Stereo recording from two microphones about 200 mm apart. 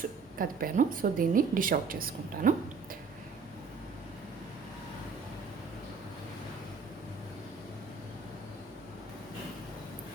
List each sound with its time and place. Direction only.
0.3 s a woman's voice: 45° right (ahead or behind)